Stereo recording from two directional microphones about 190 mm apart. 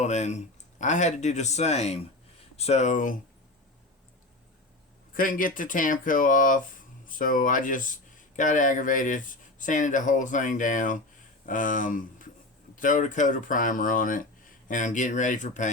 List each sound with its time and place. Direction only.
0.0 s speech: 35° left (ahead or behind)
5.1 s speech: 45° left (ahead or behind)